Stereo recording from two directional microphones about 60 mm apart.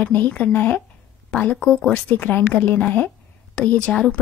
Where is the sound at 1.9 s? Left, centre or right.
Left.